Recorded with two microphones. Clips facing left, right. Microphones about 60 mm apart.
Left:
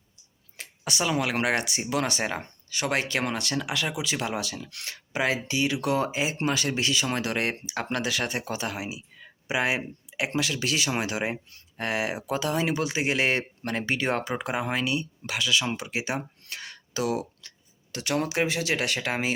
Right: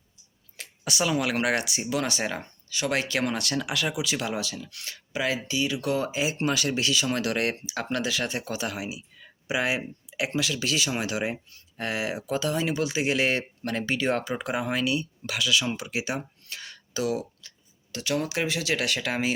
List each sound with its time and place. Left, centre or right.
0.5 s a sound: left
1.0 s speech: left
2.4 s speech: left
2.9 s speech: left
4.4 s speech: left
4.7 s speech: left
4.9 s speech: left
16.4 s a sound: left
17.9 s speech: left